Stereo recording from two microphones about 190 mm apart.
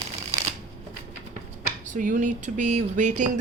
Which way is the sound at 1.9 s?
40° right (ahead or behind).